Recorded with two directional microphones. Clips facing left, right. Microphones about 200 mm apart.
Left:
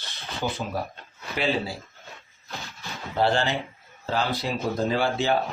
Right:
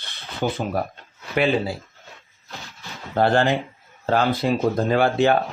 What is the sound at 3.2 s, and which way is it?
Speech, 50° right (ahead or behind).